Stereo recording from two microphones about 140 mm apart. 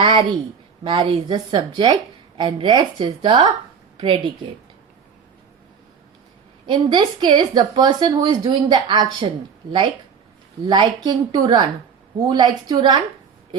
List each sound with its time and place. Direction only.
0.0 s speech: 35° right (ahead or behind)
6.7 s speech: 30° right (ahead or behind)
10.7 s speech: 30° right (ahead or behind)